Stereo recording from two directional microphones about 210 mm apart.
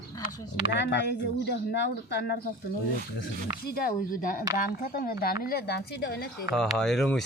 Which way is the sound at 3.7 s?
45° left (ahead or behind).